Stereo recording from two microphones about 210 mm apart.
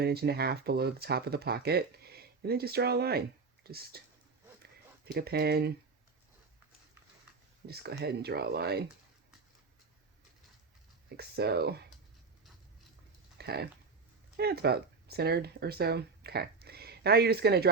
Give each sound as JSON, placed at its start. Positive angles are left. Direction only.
{"t": 0.0, "sound": "speech", "side_deg": -50}
{"t": 5.1, "sound": "speech", "side_deg": -50}
{"t": 7.7, "sound": "speech", "side_deg": -50}
{"t": 11.2, "sound": "speech", "side_deg": -50}
{"t": 13.4, "sound": "speech", "side_deg": -50}